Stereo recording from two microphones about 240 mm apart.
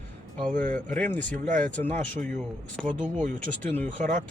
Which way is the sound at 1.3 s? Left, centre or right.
Right.